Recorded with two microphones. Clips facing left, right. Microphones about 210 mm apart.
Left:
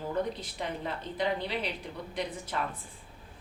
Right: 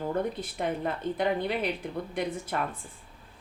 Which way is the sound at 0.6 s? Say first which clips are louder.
Right 7 dB; 50° right (ahead or behind).